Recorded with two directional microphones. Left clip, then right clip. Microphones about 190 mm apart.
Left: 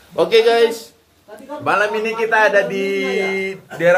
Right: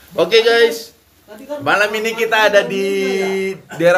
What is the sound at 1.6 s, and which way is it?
Speech, 5° right (ahead or behind).